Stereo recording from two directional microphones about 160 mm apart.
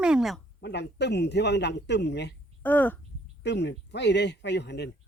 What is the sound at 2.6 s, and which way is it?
Speech, 10° left (ahead or behind).